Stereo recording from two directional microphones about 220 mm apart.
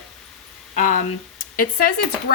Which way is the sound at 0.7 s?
35° left (ahead or behind).